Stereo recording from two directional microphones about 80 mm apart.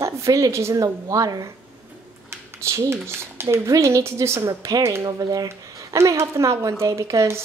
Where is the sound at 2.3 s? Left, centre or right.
Right.